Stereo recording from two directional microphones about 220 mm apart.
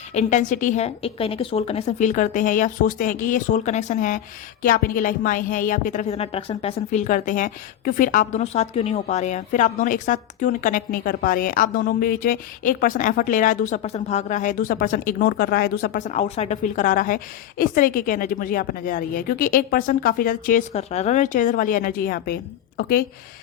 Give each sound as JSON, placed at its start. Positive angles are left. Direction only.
{"t": 0.1, "sound": "speech", "side_deg": 30}